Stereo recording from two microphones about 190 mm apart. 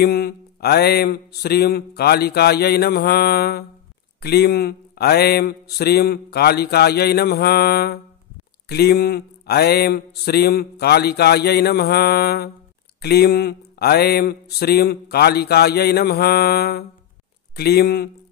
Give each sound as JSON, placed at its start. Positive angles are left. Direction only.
{"t": 0.0, "sound": "speech", "side_deg": 55}